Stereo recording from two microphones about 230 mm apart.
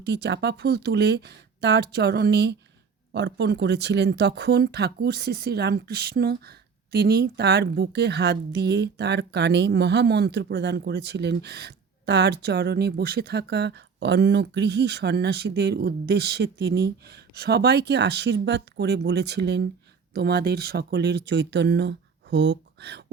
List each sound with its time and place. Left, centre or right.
0.0 s speech: right